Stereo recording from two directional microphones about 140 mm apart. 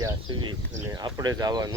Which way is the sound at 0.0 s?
25° right (ahead or behind).